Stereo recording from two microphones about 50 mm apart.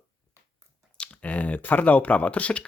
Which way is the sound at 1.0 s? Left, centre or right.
Left.